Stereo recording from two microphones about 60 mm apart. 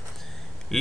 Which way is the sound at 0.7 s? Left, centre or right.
Centre.